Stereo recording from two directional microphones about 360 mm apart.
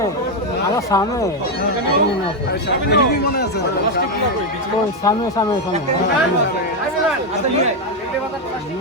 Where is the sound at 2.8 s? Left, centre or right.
Left.